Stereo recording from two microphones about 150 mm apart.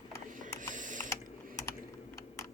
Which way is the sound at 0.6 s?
60° right (ahead or behind).